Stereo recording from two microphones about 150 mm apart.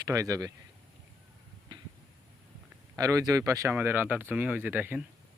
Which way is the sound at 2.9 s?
25° right (ahead or behind).